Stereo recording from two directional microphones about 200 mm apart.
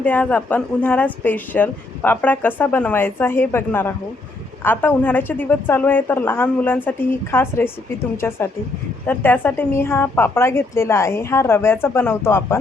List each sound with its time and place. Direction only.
0.0 s a woman's voice: 10° left (ahead or behind)